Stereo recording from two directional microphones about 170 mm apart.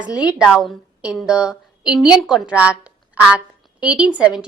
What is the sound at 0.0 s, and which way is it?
A woman's voice, 5° right (ahead or behind).